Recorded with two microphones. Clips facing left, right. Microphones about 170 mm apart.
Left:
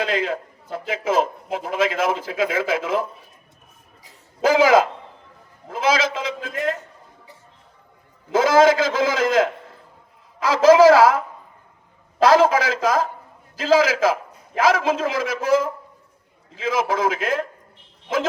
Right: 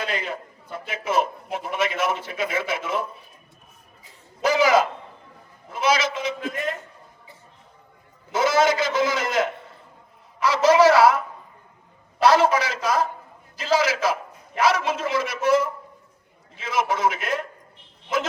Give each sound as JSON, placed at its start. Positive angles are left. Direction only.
{"t": 0.0, "sound": "a man's voice", "side_deg": 90}
{"t": 4.4, "sound": "a man's voice", "side_deg": 90}
{"t": 5.6, "sound": "a man's voice", "side_deg": 90}
{"t": 8.3, "sound": "a man's voice", "side_deg": 90}
{"t": 12.2, "sound": "a man's voice", "side_deg": 90}